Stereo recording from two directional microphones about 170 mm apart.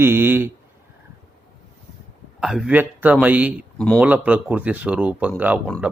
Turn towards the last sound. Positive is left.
turn(degrees=-10)  # may be behind; listen again after turning